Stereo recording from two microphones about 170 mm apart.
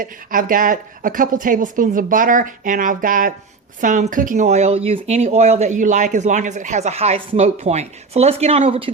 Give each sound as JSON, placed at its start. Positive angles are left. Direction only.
{"t": 0.0, "sound": "speech", "side_deg": -55}